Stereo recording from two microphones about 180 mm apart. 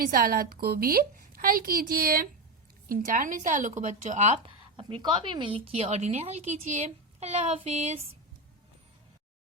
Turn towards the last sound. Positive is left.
turn(degrees=-40)  # may be behind; listen again after turning